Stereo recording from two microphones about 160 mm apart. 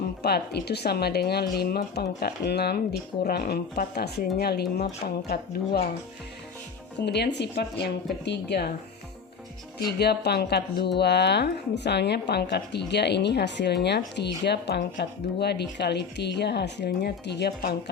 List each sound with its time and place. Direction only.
0.2 s speech: 85° left
7.0 s speech: 90° left
10.0 s speech: 90° left